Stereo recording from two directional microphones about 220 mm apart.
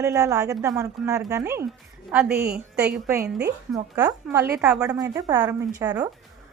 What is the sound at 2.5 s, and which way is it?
A woman's voice, 5° right (ahead or behind).